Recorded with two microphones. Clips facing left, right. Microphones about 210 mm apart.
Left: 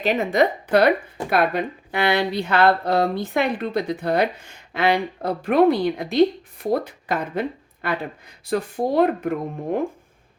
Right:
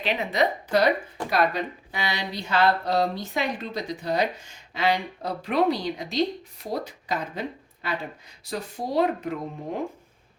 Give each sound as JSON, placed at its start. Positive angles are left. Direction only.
{"t": 0.0, "sound": "speech", "side_deg": 45}